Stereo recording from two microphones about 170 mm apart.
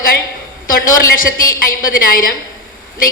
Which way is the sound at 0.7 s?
55° left (ahead or behind).